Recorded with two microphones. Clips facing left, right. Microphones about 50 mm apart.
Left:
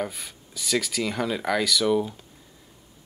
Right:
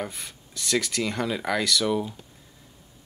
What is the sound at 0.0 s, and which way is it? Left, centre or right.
Speech, centre.